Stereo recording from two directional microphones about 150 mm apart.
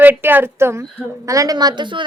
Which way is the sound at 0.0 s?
10° right (ahead or behind).